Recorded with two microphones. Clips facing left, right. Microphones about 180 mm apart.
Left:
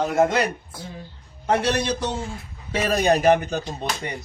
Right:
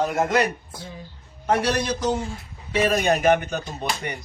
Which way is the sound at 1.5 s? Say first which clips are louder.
Even; 25° left (ahead or behind).